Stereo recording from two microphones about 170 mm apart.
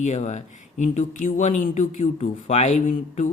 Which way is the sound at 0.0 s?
45° left (ahead or behind).